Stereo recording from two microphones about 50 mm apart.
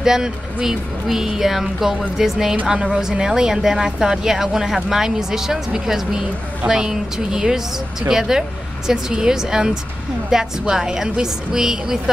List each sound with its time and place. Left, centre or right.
0.0 s speech: centre